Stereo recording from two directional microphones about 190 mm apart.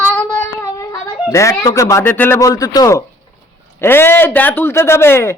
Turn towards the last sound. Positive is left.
turn(degrees=10)  # may be behind; listen again after turning